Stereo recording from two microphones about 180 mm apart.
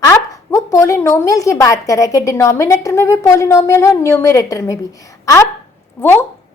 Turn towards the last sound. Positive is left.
turn(degrees=10)  # may be behind; listen again after turning